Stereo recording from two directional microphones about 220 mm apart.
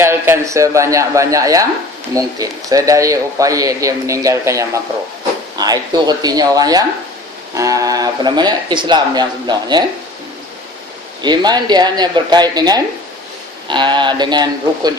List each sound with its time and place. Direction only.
0.0 s a man's voice: 10° right (ahead or behind)
11.2 s speech: 20° right (ahead or behind)